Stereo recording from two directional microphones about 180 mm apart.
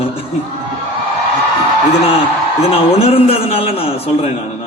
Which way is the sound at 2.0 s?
35° left (ahead or behind).